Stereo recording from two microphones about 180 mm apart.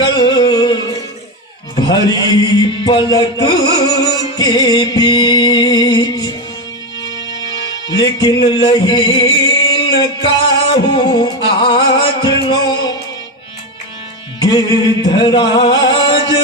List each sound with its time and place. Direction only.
0.1 s music: 25° left (ahead or behind)
1.7 s a man's voice: 25° left (ahead or behind)
7.0 s music: 80° left
7.9 s music: 20° left (ahead or behind)
14.3 s music: 20° left (ahead or behind)